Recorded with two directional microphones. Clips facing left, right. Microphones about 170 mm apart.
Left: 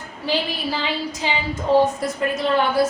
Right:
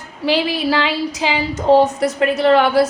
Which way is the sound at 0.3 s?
90° right.